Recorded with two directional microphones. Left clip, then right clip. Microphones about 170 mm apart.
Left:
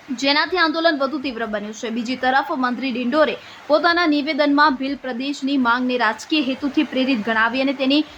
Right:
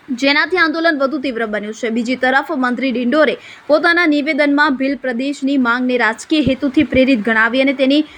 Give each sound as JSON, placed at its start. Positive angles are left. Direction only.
{"t": 0.2, "sound": "a woman's voice", "side_deg": -25}